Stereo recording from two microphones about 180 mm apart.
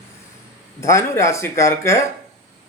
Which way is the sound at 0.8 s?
15° left (ahead or behind).